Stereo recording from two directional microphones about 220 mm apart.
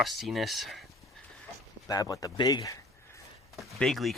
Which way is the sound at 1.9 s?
15° left (ahead or behind).